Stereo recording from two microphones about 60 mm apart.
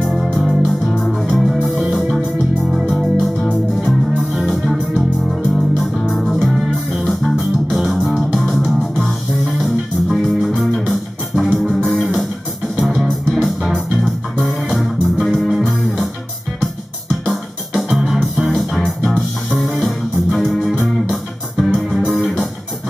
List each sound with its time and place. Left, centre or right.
0.0 s music: centre
4.5 s music: centre
17.3 s music: centre
19.1 s music: centre
19.7 s music: centre